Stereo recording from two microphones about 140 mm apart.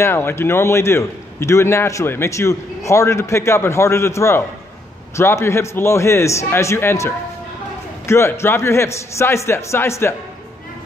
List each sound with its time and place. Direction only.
0.0 s a man's voice: 15° left (ahead or behind)